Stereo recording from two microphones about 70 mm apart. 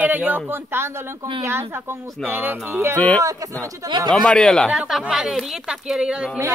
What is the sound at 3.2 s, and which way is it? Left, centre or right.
Speech, right.